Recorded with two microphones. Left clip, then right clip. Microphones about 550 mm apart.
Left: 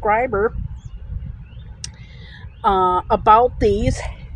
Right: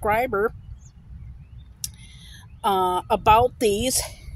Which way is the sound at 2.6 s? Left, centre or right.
Right.